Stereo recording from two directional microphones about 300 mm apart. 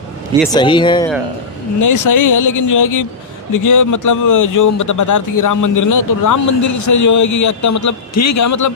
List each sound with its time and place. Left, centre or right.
0.4 s speech: centre
1.8 s a man's voice: left